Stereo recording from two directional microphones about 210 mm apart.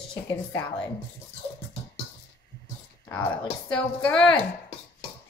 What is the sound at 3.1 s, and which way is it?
A woman's voice, 5° left (ahead or behind).